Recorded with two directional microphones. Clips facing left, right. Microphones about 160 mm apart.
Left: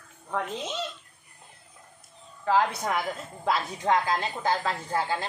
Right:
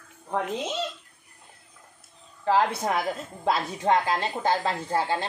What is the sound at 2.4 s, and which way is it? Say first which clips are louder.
Speech: right 2 dB; 30° right (ahead or behind).